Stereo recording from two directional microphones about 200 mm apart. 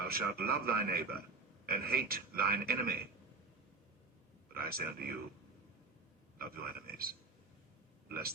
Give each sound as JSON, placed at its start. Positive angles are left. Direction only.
{"t": 0.0, "sound": "a man's voice", "side_deg": -50}
{"t": 4.5, "sound": "a man's voice", "side_deg": -50}
{"t": 6.4, "sound": "a man's voice", "side_deg": -50}